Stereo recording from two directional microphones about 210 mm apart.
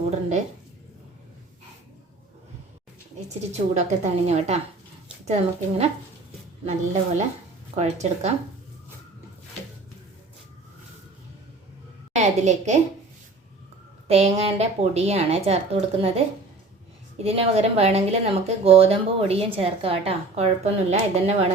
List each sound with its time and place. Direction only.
3.2 s a woman's voice: 35° right (ahead or behind)
12.1 s a woman's voice: 35° right (ahead or behind)
14.1 s speech: 30° right (ahead or behind)
17.2 s speech: 30° right (ahead or behind)